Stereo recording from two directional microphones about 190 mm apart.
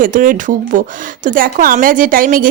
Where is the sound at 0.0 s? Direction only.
45° right (ahead or behind).